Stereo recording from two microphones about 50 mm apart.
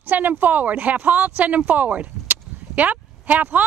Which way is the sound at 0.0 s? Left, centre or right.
Right.